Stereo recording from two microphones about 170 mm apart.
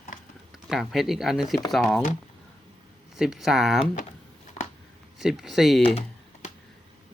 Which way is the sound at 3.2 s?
5° right (ahead or behind).